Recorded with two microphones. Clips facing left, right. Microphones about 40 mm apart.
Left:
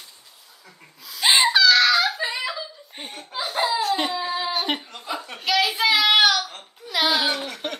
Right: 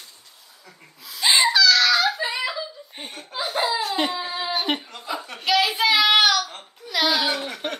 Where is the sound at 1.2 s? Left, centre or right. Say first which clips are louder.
Left 1 dB; centre.